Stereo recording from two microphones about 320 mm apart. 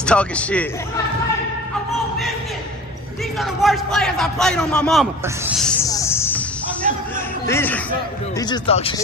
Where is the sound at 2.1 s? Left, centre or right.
Centre.